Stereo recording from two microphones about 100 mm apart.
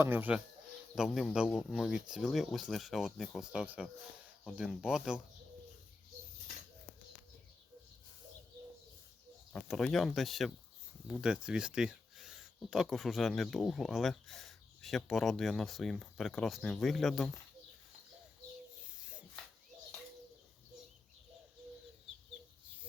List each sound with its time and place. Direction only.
0.0 s speech: 20° right (ahead or behind)
0.9 s speech: 5° right (ahead or behind)
9.5 s speech: 5° left (ahead or behind)